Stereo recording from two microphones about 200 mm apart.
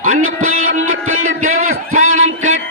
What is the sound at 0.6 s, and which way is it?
Music, 90° right.